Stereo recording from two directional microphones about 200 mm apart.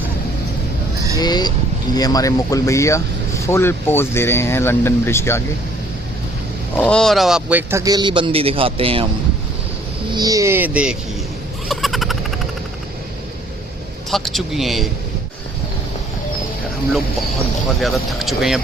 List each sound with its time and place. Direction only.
1.2 s speech: 20° left (ahead or behind)
6.7 s a man's voice: 5° left (ahead or behind); by 9.0 s 25° right (ahead or behind)
10.2 s speech: 15° right (ahead or behind)
11.7 s a sound: centre (ahead or behind)
14.1 s speech: centre (ahead or behind)
17.7 s speech: centre (ahead or behind)